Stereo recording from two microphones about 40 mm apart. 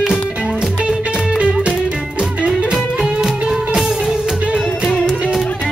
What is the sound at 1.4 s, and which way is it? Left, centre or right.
Music, right.